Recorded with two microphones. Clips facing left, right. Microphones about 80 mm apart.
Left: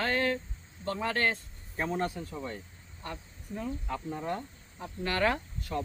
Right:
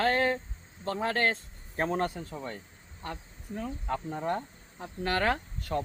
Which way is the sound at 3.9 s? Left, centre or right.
Right.